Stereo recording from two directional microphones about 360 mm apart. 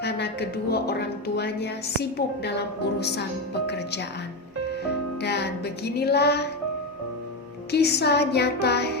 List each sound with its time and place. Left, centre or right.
0.0 s a woman's voice: left
5.2 s music: left
7.7 s a woman's voice: left